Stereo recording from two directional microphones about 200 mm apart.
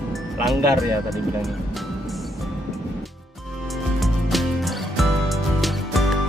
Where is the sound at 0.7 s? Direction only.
Centre (ahead or behind).